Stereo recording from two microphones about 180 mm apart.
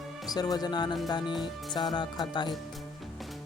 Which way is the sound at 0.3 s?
20° left (ahead or behind).